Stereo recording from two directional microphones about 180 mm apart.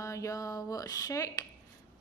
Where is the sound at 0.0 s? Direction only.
15° left (ahead or behind).